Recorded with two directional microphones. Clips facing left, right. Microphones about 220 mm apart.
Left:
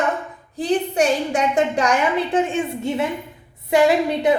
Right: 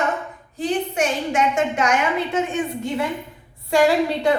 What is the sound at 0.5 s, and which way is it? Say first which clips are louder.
A woman's voice: left 3 dB; 35° left (ahead or behind).